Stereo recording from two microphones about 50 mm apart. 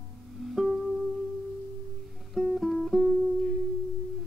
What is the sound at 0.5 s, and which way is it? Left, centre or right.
Music, centre.